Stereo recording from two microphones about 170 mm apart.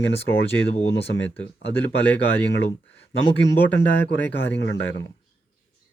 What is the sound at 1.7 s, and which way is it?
Speech, 10° left (ahead or behind).